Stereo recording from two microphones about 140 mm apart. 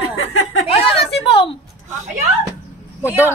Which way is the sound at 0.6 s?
45° left (ahead or behind).